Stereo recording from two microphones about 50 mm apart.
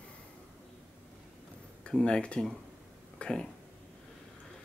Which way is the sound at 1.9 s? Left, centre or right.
Centre.